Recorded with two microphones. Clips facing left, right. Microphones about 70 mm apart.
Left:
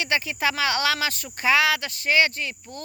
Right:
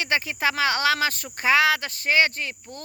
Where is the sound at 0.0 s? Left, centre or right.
Right.